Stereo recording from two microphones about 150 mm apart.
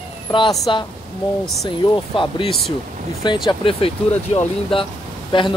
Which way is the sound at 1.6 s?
30° left (ahead or behind).